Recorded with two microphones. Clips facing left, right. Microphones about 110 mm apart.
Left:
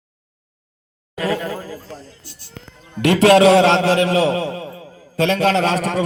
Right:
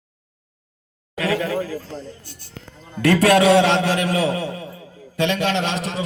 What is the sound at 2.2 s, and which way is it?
Speech, 50° right (ahead or behind).